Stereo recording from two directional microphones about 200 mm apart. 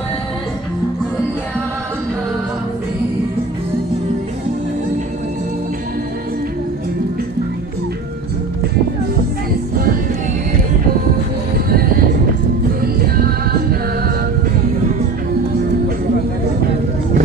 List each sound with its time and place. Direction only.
11.5 s music: 50° right (ahead or behind)